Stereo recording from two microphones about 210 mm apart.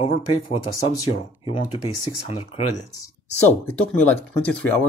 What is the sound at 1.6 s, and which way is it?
Speech, 90° left.